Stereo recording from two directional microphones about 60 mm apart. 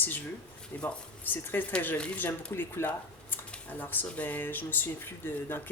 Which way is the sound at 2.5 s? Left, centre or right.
Left.